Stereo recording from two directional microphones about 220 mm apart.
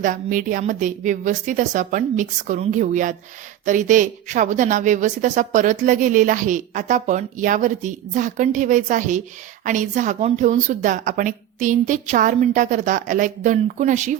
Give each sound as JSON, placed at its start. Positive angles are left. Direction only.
{"t": 0.0, "sound": "a woman's voice", "side_deg": -35}